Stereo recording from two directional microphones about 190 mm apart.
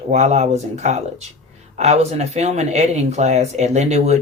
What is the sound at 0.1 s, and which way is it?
Speech, 35° right (ahead or behind).